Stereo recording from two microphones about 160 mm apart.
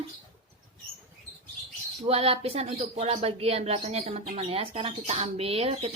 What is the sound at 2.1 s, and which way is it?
Speech, 35° right (ahead or behind).